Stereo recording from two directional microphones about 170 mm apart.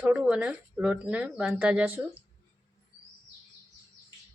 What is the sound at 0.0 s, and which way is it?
Speech, 5° right (ahead or behind).